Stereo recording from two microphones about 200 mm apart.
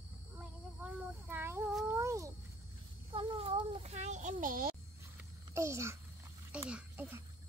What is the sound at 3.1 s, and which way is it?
A child's voice, 25° right (ahead or behind).